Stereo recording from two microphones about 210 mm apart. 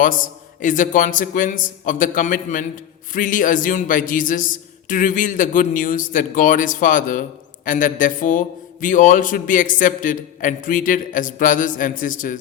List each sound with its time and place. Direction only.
0.6 s speech: 40° left (ahead or behind)